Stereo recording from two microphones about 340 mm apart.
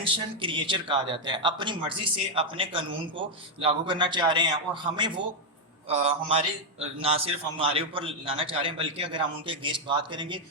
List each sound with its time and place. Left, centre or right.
0.4 s speech: centre